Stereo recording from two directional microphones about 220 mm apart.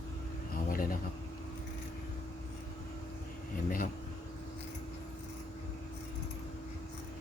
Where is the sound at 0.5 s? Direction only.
40° left (ahead or behind).